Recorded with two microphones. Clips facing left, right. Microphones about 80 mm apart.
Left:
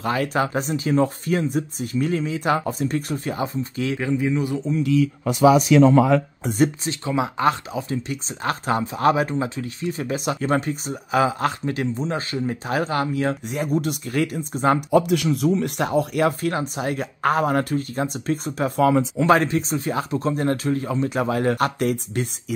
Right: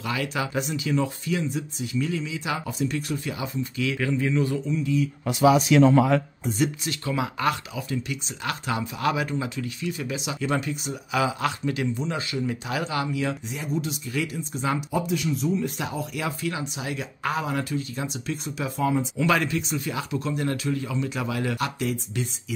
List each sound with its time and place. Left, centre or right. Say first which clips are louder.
0.0 s speech: left 6 dB; left
4.0 s a man's voice: left 2 dB; centre
6.6 s speech: left 6 dB; left
18.8 s speech: left 7 dB; left
19.1 s speech: left 6 dB; left